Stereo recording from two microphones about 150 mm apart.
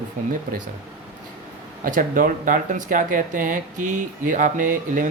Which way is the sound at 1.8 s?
65° right (ahead or behind).